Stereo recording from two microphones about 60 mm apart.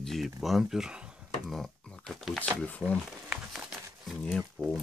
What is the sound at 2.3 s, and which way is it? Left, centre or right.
Speech, centre.